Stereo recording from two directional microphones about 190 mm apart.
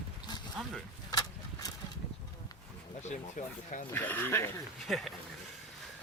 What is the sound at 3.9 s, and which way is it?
Speech, 10° left (ahead or behind).